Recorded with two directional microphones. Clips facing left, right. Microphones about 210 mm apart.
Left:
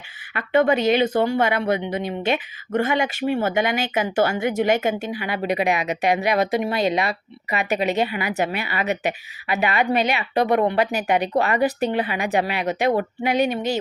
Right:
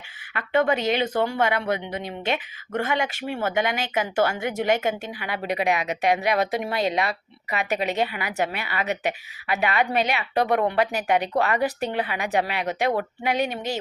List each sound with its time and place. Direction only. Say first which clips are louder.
0.7 s speech: left 5 dB; 10° left (ahead or behind)